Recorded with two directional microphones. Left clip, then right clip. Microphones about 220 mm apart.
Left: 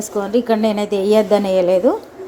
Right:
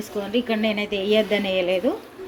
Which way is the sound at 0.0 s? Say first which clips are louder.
Left 7 dB; 20° left (ahead or behind).